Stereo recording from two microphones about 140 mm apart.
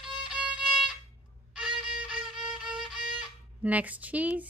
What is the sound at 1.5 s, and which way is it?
Violin, 5° right (ahead or behind).